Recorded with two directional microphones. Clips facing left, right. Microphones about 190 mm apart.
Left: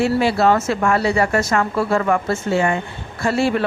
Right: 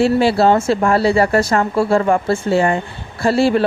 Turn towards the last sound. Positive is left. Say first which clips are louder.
# right 4 dB
turn(degrees=-30)  # may be behind; listen again after turning